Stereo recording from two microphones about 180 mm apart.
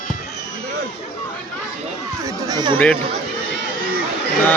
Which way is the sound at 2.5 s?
25° right (ahead or behind).